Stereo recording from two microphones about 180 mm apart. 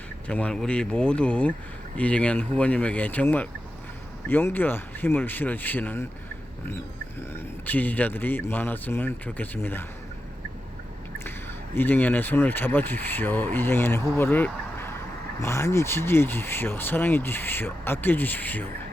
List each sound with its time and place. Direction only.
0.3 s speech: 5° left (ahead or behind)
7.6 s speech: 10° left (ahead or behind)
11.2 s speech: 10° left (ahead or behind)